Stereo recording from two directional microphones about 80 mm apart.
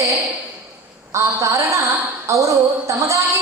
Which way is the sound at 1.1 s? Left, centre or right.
Right.